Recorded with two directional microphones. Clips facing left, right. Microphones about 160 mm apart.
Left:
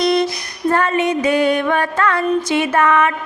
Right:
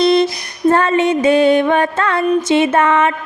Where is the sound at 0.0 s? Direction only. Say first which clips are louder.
Right 4 dB; 25° right (ahead or behind).